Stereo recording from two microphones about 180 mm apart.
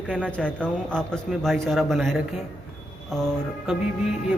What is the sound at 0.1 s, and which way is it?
Speech, 5° left (ahead or behind).